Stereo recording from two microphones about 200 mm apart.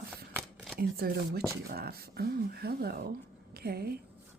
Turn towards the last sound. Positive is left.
turn(degrees=-50)  # may be behind; listen again after turning